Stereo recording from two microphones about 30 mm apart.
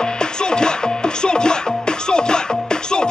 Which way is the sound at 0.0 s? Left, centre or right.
Left.